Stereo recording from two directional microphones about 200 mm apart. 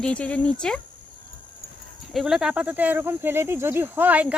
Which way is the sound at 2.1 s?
Centre (ahead or behind).